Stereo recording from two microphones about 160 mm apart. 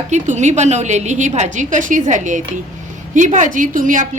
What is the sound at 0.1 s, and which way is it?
A woman's voice, 50° right (ahead or behind).